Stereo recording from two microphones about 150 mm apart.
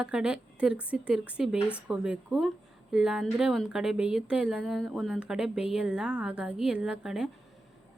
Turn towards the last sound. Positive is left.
turn(degrees=-5)  # may be behind; listen again after turning